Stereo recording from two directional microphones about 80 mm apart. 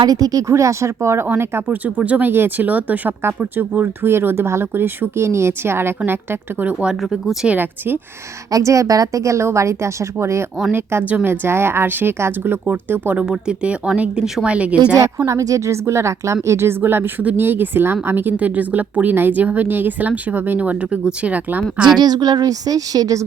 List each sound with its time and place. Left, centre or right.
0.0 s speech: right
6.6 s speech: centre
7.0 s speech: centre
7.4 s speech: right
8.4 s speech: right
10.7 s speech: right
13.2 s speech: centre
15.3 s speech: right; by 21.6 s centre
21.9 s a woman's voice: right